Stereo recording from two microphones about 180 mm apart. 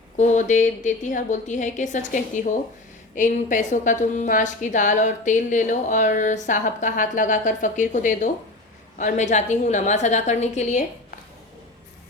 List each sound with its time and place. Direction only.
0.2 s a woman's voice: 45° left (ahead or behind)